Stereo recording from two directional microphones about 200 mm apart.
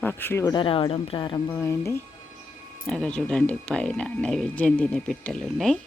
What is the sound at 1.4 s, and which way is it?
Speech, 15° left (ahead or behind).